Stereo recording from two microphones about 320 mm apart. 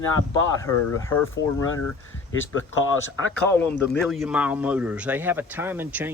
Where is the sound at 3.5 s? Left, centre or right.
Centre.